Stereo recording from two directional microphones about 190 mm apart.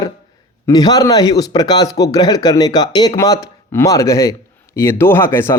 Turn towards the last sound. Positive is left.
turn(degrees=15)  # may be behind; listen again after turning